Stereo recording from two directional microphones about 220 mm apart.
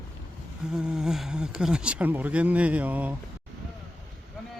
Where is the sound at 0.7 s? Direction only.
5° right (ahead or behind).